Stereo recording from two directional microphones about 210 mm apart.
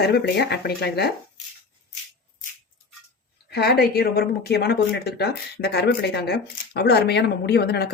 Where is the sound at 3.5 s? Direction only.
50° left (ahead or behind).